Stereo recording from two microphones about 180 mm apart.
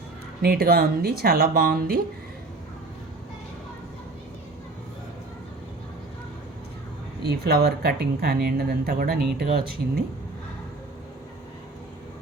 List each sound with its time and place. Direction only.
0.4 s speech: 55° right (ahead or behind)
7.2 s speech: 65° right (ahead or behind)